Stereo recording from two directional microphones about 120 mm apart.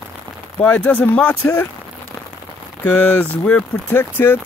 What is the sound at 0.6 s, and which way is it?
Speech, 10° left (ahead or behind).